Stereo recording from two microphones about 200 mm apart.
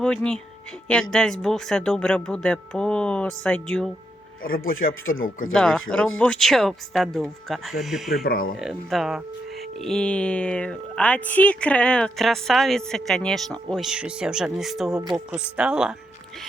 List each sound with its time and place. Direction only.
0.0 s speech: 5° left (ahead or behind)
4.4 s speech: 45° left (ahead or behind)
5.5 s speech: 5° left (ahead or behind)
8.2 s speech: 45° left (ahead or behind)
8.5 s speech: centre (ahead or behind)